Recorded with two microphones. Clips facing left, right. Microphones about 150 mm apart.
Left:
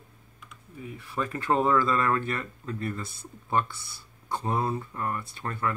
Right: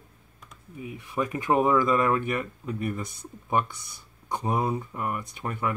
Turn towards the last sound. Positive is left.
turn(degrees=-15)  # may be behind; listen again after turning